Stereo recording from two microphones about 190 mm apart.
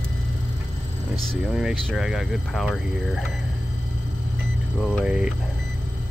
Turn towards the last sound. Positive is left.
turn(degrees=-5)  # may be behind; listen again after turning